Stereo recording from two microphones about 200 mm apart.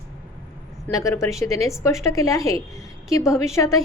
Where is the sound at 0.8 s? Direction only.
15° left (ahead or behind).